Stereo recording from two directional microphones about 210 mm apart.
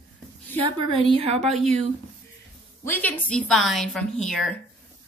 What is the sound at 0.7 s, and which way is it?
Speech, 25° right (ahead or behind).